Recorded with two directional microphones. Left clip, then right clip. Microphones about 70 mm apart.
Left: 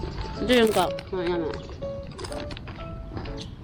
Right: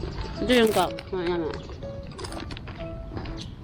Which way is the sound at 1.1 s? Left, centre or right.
Centre.